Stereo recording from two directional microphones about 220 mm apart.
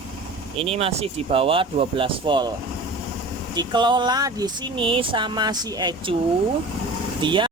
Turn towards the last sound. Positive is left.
turn(degrees=-20)  # may be behind; listen again after turning